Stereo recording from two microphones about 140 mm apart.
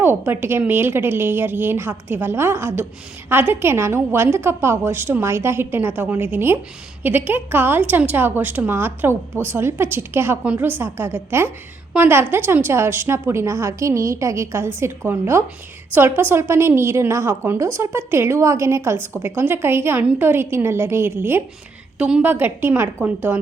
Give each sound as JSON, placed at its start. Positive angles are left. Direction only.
{"t": 0.0, "sound": "a woman's voice", "side_deg": -15}